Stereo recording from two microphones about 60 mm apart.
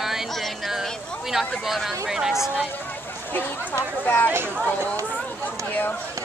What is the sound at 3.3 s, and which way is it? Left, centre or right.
Speech, left.